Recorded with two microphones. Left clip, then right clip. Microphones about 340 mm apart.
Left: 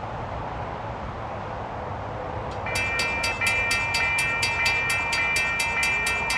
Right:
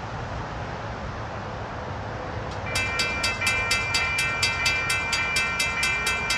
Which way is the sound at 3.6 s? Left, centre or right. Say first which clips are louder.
Left 1 dB; centre.